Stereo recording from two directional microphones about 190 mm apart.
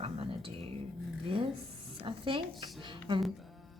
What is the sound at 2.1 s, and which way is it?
Speech, 25° right (ahead or behind).